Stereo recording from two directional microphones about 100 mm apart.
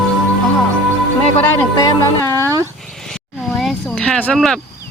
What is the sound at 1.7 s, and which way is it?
Speech, 35° left (ahead or behind).